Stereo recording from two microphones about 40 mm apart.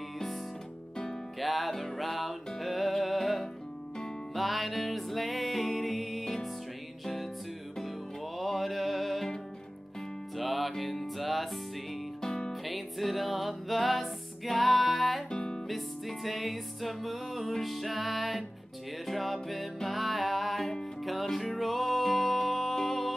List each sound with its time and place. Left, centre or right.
1.4 s music: centre
8.4 s music: centre
10.3 s music: centre
12.2 s music: centre
12.6 s music: centre
15.3 s music: centre
15.7 s music: centre